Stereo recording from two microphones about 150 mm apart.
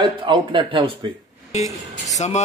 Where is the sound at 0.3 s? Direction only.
35° right (ahead or behind).